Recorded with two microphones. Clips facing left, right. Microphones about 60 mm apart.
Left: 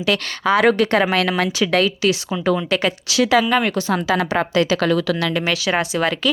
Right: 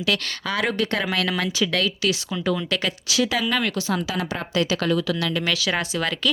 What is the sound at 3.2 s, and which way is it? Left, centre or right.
Speech, left.